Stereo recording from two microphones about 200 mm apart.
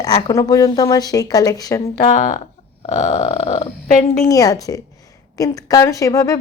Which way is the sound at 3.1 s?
25° left (ahead or behind).